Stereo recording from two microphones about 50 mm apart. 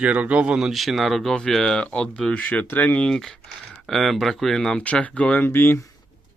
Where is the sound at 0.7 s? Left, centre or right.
Centre.